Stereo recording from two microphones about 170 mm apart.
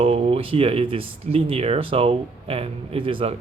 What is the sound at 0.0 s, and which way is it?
Speech, 35° right (ahead or behind).